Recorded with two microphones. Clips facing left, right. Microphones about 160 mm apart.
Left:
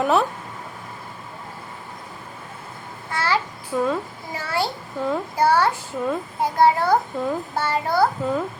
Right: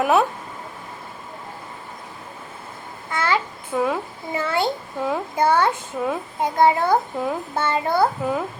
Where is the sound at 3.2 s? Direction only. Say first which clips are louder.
Right 1 dB; 20° right (ahead or behind).